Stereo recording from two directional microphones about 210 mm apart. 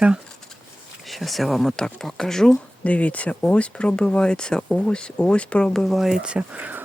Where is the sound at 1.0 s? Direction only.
Centre (ahead or behind).